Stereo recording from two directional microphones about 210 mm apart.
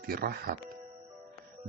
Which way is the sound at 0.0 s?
45° right (ahead or behind).